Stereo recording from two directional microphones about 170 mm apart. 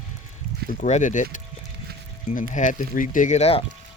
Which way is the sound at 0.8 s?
45° left (ahead or behind).